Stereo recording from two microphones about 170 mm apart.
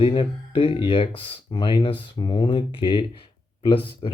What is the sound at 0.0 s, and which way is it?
Speech, 30° left (ahead or behind).